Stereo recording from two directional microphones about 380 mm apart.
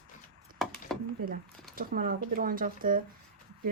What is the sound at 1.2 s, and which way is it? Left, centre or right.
Speech, right.